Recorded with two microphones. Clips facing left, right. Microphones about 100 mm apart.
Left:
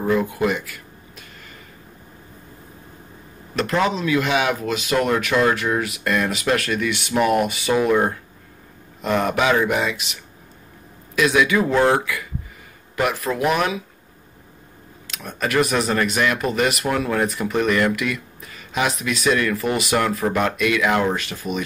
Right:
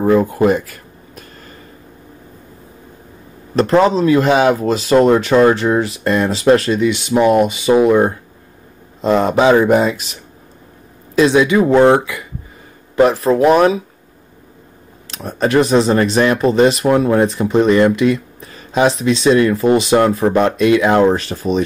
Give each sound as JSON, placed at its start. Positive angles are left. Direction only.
{"t": 0.0, "sound": "a sound", "side_deg": -40}
{"t": 3.5, "sound": "speech", "side_deg": -35}
{"t": 11.1, "sound": "speech", "side_deg": -30}
{"t": 15.0, "sound": "speech", "side_deg": -35}